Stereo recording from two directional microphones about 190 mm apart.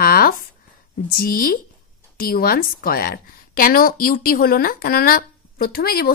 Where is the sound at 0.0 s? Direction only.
50° left (ahead or behind).